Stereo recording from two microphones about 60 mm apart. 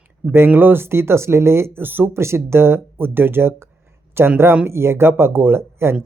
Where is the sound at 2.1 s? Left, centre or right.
Right.